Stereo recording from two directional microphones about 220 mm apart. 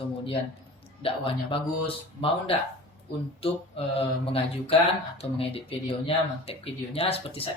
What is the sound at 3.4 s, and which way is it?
Speech, 25° left (ahead or behind).